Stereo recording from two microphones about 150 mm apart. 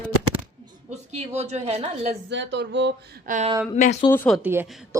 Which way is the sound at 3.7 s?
50° left (ahead or behind).